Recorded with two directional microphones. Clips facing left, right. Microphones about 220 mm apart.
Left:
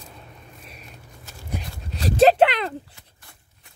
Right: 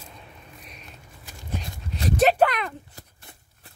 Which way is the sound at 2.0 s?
35° left (ahead or behind).